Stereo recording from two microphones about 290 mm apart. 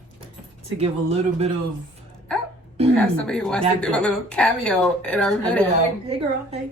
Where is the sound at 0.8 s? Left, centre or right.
Right.